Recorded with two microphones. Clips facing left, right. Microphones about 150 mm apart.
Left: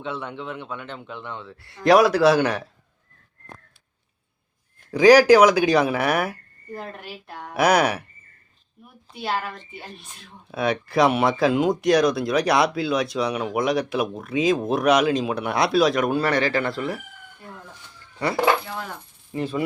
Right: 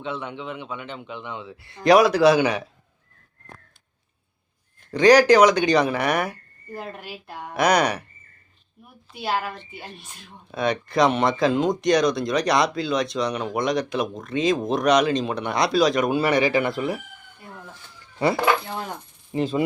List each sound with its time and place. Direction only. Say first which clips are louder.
0.0 s speech: even; centre (ahead or behind)
4.9 s speech: left 2 dB; 5° left (ahead or behind)
9.1 s speech: right 1 dB; 5° right (ahead or behind)
16.3 s speech: right 2 dB; 15° right (ahead or behind)
18.8 s speech: right 2 dB; 20° right (ahead or behind)